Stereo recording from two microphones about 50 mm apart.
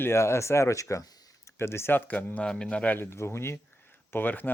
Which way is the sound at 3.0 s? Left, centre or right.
Left.